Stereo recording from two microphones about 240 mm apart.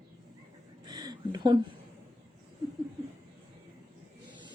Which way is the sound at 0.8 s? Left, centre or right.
Centre.